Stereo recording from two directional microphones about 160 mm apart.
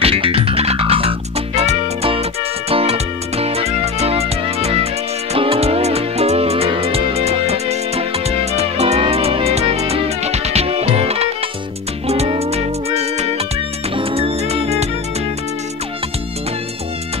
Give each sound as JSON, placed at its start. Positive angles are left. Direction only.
{"t": 0.0, "sound": "music", "side_deg": -35}